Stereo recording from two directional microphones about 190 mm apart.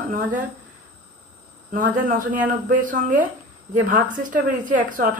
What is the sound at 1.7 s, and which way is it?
A woman's voice, 45° right (ahead or behind).